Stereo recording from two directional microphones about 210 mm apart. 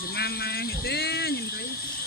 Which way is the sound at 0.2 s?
50° left (ahead or behind).